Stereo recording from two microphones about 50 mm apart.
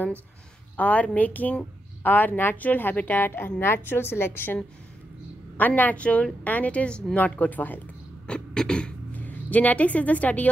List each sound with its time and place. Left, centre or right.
0.7 s a woman's voice: left
5.6 s a woman's voice: left
8.3 s beatboxing: centre
9.1 s a woman's voice: left